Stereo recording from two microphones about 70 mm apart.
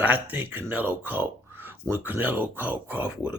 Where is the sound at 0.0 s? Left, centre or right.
Right.